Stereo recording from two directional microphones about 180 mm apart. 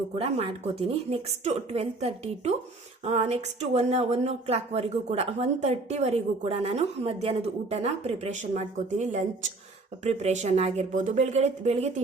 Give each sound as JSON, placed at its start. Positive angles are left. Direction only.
{"t": 0.2, "sound": "speech", "side_deg": -35}